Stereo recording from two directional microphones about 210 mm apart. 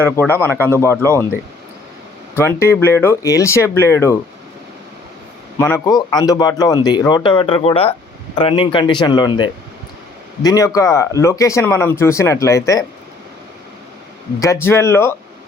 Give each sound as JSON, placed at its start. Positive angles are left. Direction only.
{"t": 0.2, "sound": "speech", "side_deg": 10}
{"t": 2.3, "sound": "speech", "side_deg": 10}
{"t": 5.5, "sound": "speech", "side_deg": 15}
{"t": 14.3, "sound": "speech", "side_deg": 15}